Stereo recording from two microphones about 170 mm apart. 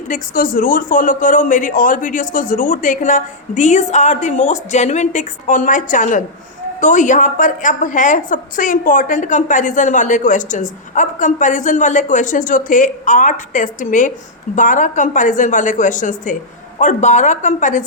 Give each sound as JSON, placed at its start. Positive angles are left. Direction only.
{"t": 0.1, "sound": "a woman's voice", "side_deg": 55}